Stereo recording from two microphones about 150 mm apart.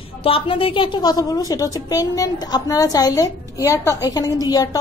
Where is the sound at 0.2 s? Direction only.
40° left (ahead or behind).